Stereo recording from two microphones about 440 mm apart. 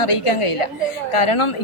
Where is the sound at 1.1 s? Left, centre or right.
Left.